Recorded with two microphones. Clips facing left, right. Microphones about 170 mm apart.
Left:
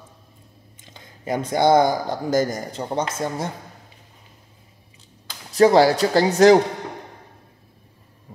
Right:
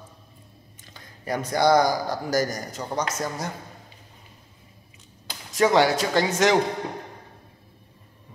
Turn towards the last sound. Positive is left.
turn(degrees=35)  # may be behind; listen again after turning